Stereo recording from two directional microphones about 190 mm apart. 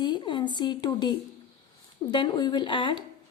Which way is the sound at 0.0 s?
25° left (ahead or behind).